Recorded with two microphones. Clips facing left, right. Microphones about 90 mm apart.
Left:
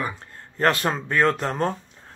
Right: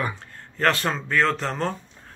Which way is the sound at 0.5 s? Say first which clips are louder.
Left 1 dB; 35° left (ahead or behind).